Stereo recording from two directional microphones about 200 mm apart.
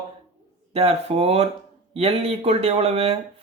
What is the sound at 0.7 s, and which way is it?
Speech, 30° right (ahead or behind).